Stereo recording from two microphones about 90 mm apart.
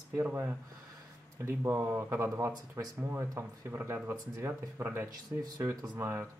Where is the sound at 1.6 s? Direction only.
25° right (ahead or behind).